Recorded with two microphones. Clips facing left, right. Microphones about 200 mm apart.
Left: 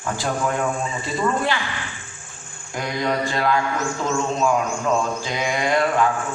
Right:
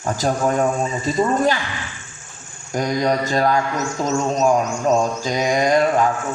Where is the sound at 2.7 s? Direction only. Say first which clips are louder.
Right 5 dB; 40° right (ahead or behind).